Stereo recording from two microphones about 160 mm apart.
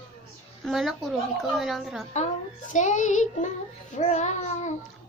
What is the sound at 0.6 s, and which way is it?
A woman's voice, centre (ahead or behind).